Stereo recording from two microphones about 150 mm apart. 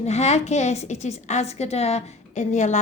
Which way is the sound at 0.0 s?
45° left (ahead or behind).